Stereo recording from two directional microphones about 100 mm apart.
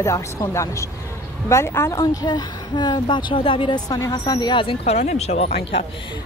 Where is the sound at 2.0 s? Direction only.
40° left (ahead or behind); by 3.8 s 65° left (ahead or behind).